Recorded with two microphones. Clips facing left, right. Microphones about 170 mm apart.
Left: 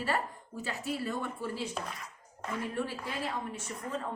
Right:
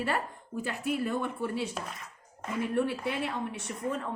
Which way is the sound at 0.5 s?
55° right (ahead or behind).